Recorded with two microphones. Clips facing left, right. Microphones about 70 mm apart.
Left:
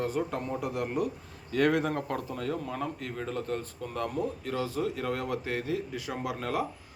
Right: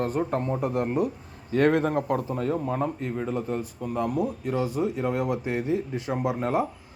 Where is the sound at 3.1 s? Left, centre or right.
Centre.